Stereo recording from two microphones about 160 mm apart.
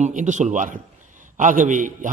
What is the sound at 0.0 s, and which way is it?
A man's voice, 50° right (ahead or behind).